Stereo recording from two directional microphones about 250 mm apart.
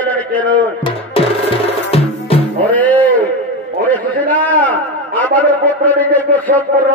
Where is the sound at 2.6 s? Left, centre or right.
Centre.